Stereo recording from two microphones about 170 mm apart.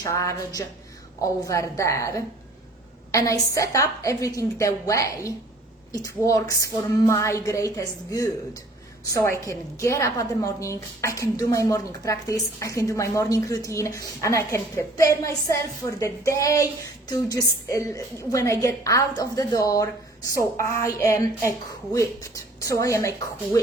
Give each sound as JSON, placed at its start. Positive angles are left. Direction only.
{"t": 0.0, "sound": "a woman's voice", "side_deg": 20}
{"t": 22.6, "sound": "a woman's voice", "side_deg": 20}